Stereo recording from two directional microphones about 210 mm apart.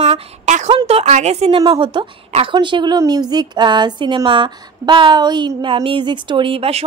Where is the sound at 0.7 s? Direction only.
25° right (ahead or behind).